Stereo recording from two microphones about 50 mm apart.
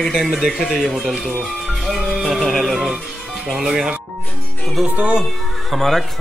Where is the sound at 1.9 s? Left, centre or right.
Centre.